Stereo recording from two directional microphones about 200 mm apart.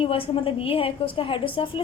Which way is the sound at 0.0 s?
25° left (ahead or behind).